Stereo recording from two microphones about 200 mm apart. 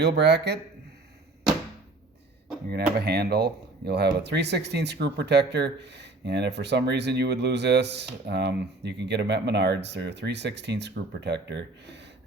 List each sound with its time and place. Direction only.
0.0 s speech: 60° right (ahead or behind)
3.0 s speech: 55° right (ahead or behind)